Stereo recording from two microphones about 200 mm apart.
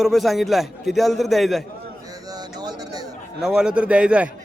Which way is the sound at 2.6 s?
20° right (ahead or behind).